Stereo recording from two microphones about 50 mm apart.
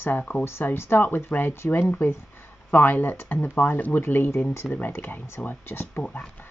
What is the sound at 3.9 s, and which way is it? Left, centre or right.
Speech, left.